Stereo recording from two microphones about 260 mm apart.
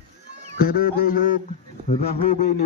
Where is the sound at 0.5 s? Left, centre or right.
Left.